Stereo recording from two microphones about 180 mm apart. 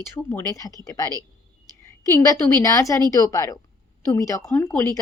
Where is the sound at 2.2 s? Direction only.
20° left (ahead or behind).